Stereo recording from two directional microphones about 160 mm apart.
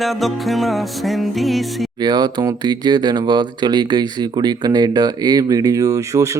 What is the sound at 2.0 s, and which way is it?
Speech, 25° right (ahead or behind).